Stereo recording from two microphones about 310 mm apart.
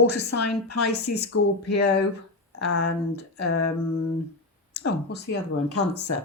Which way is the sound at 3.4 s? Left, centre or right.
Left.